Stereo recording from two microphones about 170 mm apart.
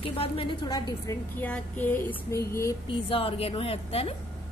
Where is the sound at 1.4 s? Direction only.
10° left (ahead or behind).